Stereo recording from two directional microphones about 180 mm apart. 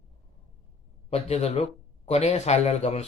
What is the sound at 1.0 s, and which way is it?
Speech, 35° left (ahead or behind).